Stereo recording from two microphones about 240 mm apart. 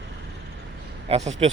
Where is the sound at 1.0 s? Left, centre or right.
Right.